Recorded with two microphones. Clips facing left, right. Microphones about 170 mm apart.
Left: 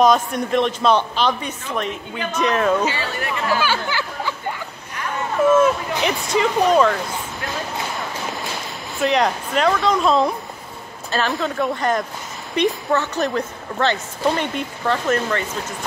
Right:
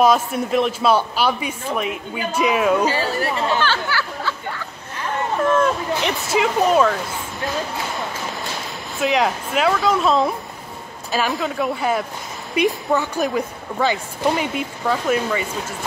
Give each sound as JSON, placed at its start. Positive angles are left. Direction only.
{"t": 0.0, "sound": "speech", "side_deg": -5}
{"t": 2.8, "sound": "speech", "side_deg": -40}
{"t": 3.5, "sound": "music", "side_deg": 10}
{"t": 5.4, "sound": "speech", "side_deg": 5}
{"t": 6.3, "sound": "speech", "side_deg": -5}
{"t": 8.9, "sound": "speech", "side_deg": 0}